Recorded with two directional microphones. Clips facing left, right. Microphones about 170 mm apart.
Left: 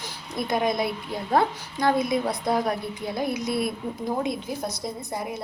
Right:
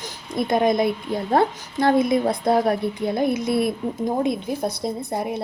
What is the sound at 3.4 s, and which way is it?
Speech, 55° right (ahead or behind).